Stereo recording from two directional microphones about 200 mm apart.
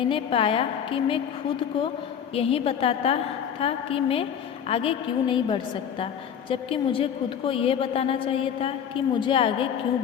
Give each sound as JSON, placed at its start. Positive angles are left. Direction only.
{"t": 0.0, "sound": "a woman's voice", "side_deg": 25}
{"t": 2.3, "sound": "a woman's voice", "side_deg": 30}